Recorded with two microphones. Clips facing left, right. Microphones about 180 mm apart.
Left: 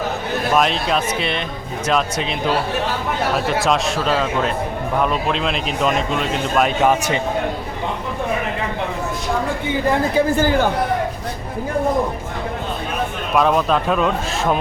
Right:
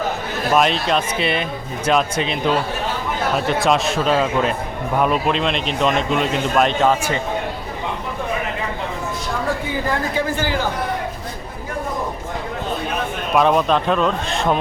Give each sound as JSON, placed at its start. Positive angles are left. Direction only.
{"t": 0.5, "sound": "speech", "side_deg": 0}
{"t": 10.2, "sound": "speech", "side_deg": 50}
{"t": 13.3, "sound": "speech", "side_deg": 0}